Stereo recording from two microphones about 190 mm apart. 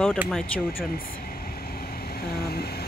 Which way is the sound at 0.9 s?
50° left (ahead or behind).